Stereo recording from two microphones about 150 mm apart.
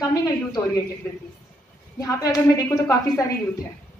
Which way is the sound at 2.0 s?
20° left (ahead or behind).